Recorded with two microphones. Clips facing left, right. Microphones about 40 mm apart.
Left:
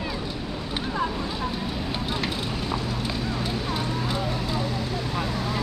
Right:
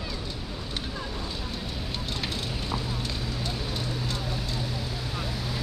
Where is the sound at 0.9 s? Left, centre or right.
Left.